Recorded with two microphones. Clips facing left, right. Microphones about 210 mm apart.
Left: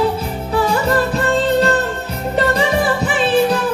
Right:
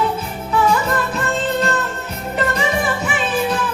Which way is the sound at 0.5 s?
35° left (ahead or behind).